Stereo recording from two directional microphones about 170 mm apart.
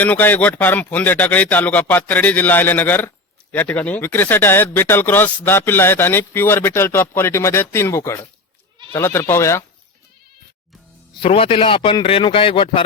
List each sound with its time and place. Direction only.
0.0 s speech: 10° left (ahead or behind)
11.1 s a man's voice: 30° left (ahead or behind)